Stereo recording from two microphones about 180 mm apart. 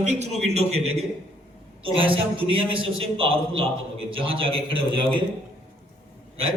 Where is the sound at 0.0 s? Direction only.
40° right (ahead or behind).